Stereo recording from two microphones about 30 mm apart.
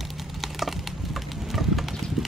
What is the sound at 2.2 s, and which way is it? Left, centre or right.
Clip-clop, centre.